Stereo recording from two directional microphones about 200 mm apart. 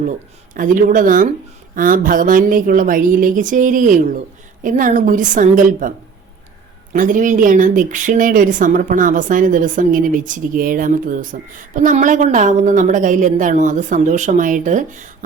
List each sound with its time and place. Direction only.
0.5 s a woman's voice: 40° right (ahead or behind)
6.9 s speech: 40° right (ahead or behind)